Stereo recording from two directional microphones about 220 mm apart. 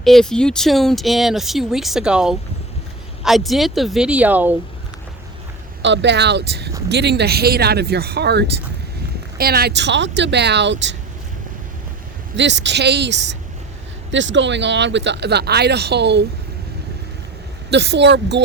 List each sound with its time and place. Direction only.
0.0 s speech: centre (ahead or behind)
5.8 s speech: 55° right (ahead or behind)
12.4 s speech: 55° right (ahead or behind)
17.7 s speech: 50° right (ahead or behind)